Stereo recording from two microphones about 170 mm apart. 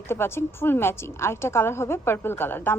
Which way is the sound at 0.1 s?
15° left (ahead or behind).